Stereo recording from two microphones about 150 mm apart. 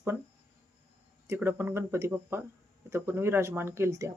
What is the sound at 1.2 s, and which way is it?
Speech, 15° right (ahead or behind).